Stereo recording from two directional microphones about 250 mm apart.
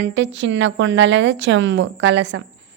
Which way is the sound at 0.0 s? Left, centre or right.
Right.